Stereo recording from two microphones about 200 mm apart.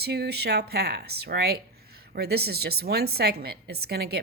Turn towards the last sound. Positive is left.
turn(degrees=-50)  # may be behind; listen again after turning